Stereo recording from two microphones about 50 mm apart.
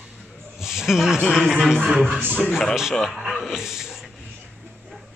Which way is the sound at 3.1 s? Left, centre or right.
Centre.